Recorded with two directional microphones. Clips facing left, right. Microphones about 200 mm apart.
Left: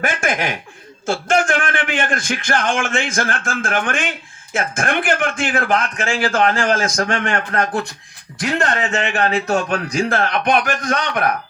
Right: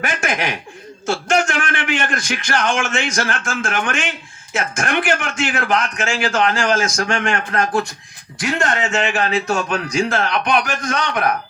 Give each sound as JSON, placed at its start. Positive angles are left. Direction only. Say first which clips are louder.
{"t": 0.0, "sound": "a man's voice", "louder": "left 1 dB", "side_deg": 50}